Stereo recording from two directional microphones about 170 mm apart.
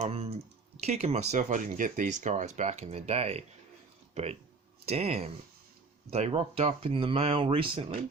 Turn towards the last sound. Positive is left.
turn(degrees=-30)  # may be behind; listen again after turning